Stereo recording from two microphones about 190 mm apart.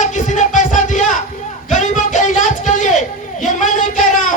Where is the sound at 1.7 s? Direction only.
40° left (ahead or behind).